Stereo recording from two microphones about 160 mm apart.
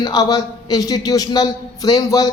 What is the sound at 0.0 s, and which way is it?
A man's voice, 25° left (ahead or behind).